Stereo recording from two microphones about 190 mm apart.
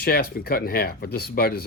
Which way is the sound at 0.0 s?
55° left (ahead or behind).